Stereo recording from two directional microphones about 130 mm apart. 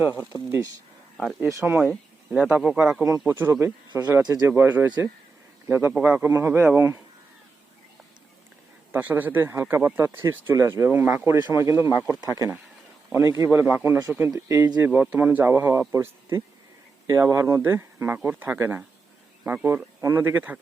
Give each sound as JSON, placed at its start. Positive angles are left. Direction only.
{"t": 1.1, "sound": "speech", "side_deg": 0}
{"t": 1.5, "sound": "speech", "side_deg": -20}
{"t": 1.8, "sound": "speech", "side_deg": -5}
{"t": 3.0, "sound": "speech", "side_deg": -20}
{"t": 4.2, "sound": "speech", "side_deg": -30}
{"t": 4.5, "sound": "speech", "side_deg": -20}
{"t": 8.9, "sound": "speech", "side_deg": -15}
{"t": 12.2, "sound": "speech", "side_deg": -30}
{"t": 14.8, "sound": "speech", "side_deg": -10}